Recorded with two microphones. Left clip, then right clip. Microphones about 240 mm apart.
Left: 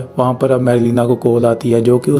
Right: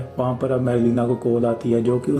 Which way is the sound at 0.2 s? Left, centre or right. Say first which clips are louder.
Left 8 dB; left.